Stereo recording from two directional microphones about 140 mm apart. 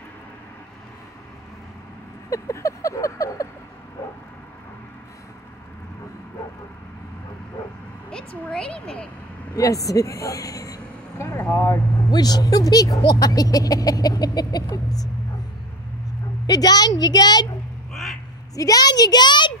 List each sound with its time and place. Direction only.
2.2 s speech: 20° left (ahead or behind)
8.1 s a woman's voice: 5° left (ahead or behind)
9.6 s speech: 25° left (ahead or behind)
16.4 s speech: 30° left (ahead or behind)
18.6 s speech: 25° left (ahead or behind)